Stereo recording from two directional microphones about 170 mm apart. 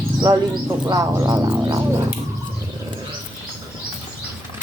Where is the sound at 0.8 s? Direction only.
20° right (ahead or behind).